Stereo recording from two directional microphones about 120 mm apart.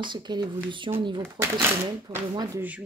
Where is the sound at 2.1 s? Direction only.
35° right (ahead or behind).